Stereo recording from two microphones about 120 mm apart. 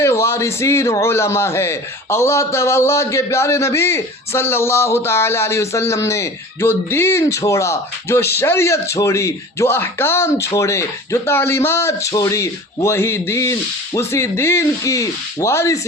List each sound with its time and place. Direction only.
0.0 s a man's voice: 25° left (ahead or behind)